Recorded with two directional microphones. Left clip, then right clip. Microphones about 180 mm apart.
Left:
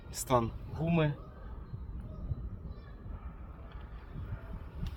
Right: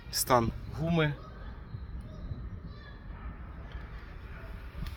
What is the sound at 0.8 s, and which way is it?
Speech, 15° right (ahead or behind).